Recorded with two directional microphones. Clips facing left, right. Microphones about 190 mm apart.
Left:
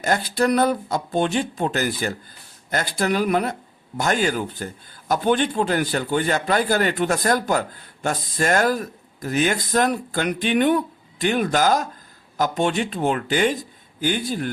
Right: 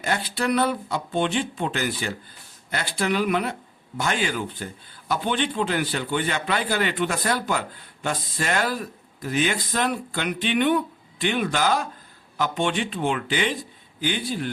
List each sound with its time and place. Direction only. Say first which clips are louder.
0.0 s speech: left 5 dB; 45° left (ahead or behind)